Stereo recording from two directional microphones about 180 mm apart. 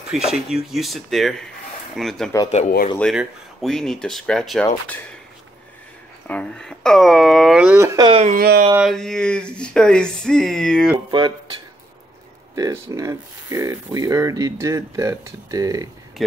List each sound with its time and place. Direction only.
0.1 s speech: 5° right (ahead or behind)
6.2 s speech: 5° left (ahead or behind); by 8.1 s 15° right (ahead or behind)
8.1 s speech: 35° right (ahead or behind)
8.4 s a sound: 55° right (ahead or behind)
8.7 s speech: centre (ahead or behind)
11.1 s speech: 25° right (ahead or behind)
12.5 s speech: 20° right (ahead or behind)
16.2 s speech: centre (ahead or behind)